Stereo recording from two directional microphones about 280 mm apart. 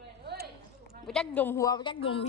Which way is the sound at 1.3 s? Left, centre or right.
Centre.